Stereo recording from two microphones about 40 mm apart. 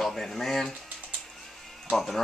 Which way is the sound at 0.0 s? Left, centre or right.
Centre.